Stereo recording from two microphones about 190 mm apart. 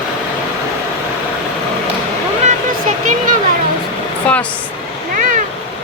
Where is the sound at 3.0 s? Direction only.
40° right (ahead or behind).